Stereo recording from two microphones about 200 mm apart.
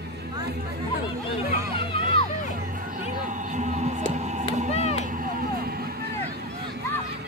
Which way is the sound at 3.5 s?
35° right (ahead or behind).